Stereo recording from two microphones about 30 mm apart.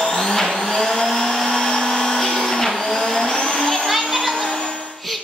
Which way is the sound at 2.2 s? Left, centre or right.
Centre.